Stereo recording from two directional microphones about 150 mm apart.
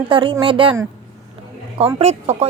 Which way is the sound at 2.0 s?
45° right (ahead or behind).